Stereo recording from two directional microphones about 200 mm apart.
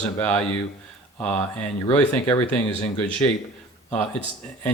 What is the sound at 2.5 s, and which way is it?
Speech, 5° left (ahead or behind).